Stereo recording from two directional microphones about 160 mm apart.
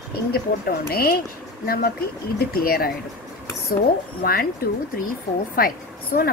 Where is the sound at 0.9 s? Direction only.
70° left (ahead or behind).